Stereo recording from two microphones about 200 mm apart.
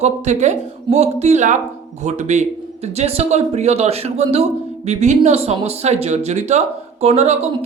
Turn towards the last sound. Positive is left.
turn(degrees=-30)  # may be behind; listen again after turning